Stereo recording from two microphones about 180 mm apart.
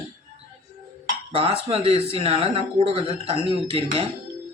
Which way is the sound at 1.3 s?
35° right (ahead or behind).